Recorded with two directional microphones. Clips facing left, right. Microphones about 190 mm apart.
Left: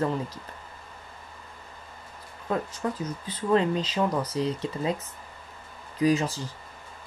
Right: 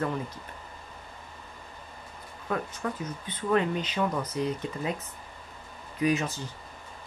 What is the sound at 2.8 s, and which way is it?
Speech, 30° left (ahead or behind).